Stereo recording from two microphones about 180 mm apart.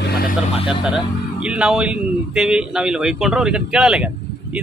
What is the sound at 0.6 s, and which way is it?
A man's voice, 5° right (ahead or behind).